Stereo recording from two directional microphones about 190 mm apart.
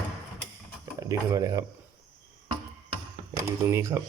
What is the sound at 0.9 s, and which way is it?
Speech, 15° right (ahead or behind).